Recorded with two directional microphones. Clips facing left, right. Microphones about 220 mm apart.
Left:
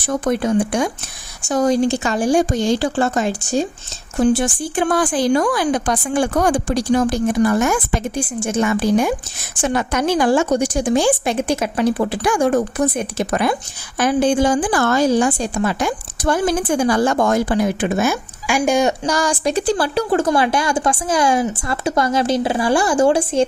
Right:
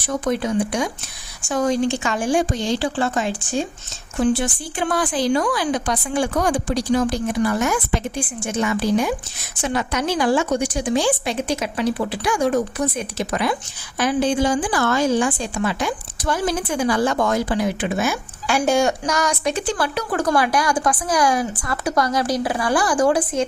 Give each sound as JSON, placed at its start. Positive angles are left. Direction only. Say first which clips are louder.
{"t": 0.0, "sound": "a woman's voice", "louder": "left 3 dB", "side_deg": 50}
{"t": 1.4, "sound": "a woman's voice", "louder": "left 4 dB", "side_deg": 40}
{"t": 18.4, "sound": "speech", "louder": "left 2 dB", "side_deg": 10}
{"t": 19.0, "sound": "a woman's voice", "louder": "left 3 dB", "side_deg": 30}